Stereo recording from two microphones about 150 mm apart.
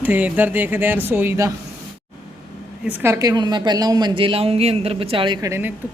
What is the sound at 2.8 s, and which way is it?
A woman's voice, 15° right (ahead or behind).